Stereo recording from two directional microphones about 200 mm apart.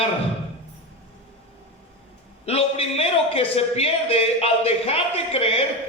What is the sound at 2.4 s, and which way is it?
A man's voice, 30° left (ahead or behind).